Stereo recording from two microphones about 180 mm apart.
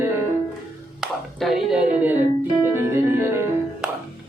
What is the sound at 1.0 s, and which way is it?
Music, centre (ahead or behind).